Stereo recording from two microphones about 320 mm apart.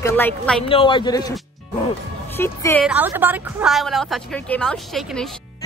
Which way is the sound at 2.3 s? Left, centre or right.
Centre.